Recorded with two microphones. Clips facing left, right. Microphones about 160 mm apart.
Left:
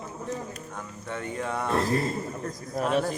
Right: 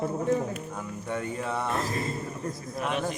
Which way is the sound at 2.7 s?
40° left (ahead or behind).